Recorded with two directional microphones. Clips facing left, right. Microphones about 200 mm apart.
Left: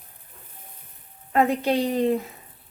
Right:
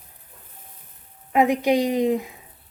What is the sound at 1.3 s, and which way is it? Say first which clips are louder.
Speech: right 2 dB; 15° right (ahead or behind).